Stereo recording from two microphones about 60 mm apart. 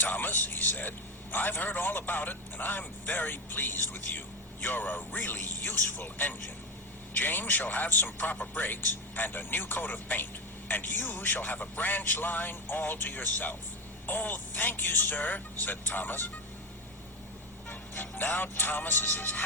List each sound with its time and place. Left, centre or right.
0.0 s a man's voice: left
17.7 s a man's voice: left